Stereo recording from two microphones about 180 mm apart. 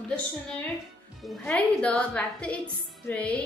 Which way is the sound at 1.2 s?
5° left (ahead or behind).